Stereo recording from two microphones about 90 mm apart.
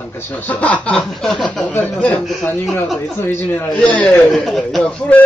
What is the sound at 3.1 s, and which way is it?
Speech, 25° left (ahead or behind).